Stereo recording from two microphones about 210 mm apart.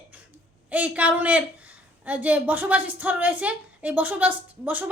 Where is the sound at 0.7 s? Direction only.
5° right (ahead or behind).